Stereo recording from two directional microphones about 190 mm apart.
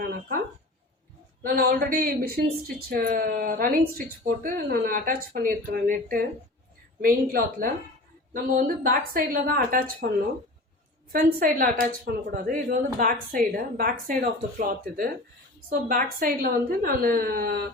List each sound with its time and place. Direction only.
0.1 s a sound: 50° right (ahead or behind)
1.4 s a woman's voice: 50° right (ahead or behind)
11.3 s a woman's voice: 45° right (ahead or behind)